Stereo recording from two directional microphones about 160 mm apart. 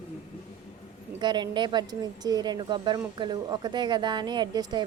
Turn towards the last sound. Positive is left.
turn(degrees=-25)  # may be behind; listen again after turning